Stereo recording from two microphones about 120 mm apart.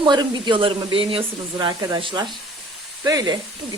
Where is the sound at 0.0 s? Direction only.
40° right (ahead or behind).